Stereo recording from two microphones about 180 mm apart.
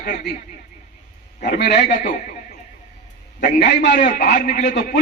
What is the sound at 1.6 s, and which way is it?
Speech, 65° left (ahead or behind).